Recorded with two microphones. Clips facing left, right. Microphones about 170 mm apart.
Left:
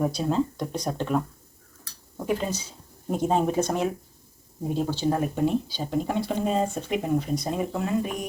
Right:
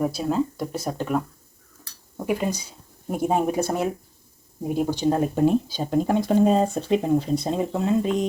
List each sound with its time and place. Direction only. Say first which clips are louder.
0.0 s speech: right 1 dB; 5° right (ahead or behind); by 5.3 s 25° right (ahead or behind)
5.3 s speech: right 5 dB; 45° right (ahead or behind); by 7.9 s 25° right (ahead or behind)